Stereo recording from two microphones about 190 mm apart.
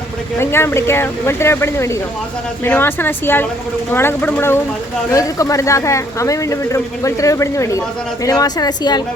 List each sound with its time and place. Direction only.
0.3 s a woman's voice: 15° left (ahead or behind)